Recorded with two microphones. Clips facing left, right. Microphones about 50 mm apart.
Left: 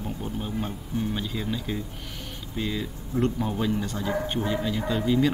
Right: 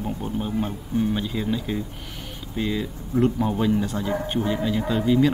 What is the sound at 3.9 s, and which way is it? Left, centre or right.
Speech, right.